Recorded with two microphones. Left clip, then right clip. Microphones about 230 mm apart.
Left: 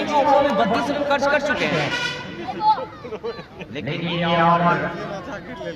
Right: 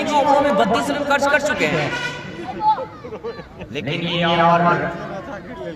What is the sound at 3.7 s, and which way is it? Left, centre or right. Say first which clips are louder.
A man's voice: right 3 dB; right.